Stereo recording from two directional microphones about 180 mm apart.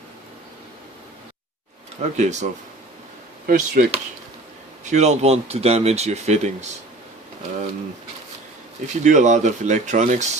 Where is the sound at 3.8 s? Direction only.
50° right (ahead or behind).